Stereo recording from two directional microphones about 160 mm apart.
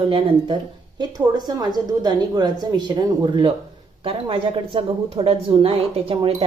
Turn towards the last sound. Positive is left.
turn(degrees=-30)  # may be behind; listen again after turning